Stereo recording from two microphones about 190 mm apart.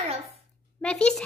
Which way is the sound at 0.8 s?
5° left (ahead or behind).